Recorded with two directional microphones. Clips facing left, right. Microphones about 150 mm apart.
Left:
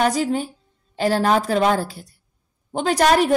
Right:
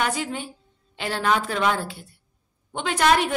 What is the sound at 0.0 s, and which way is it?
A woman's voice, 40° left (ahead or behind).